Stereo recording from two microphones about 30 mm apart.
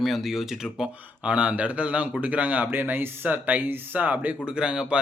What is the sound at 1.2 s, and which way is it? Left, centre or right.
Speech, right.